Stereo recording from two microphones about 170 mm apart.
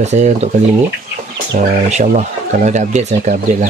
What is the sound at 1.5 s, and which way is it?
Speech, 45° right (ahead or behind).